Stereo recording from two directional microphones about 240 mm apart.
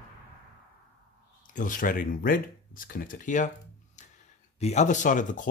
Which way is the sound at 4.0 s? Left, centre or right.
Left.